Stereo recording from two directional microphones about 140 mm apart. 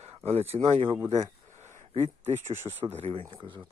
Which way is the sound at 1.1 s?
55° right (ahead or behind).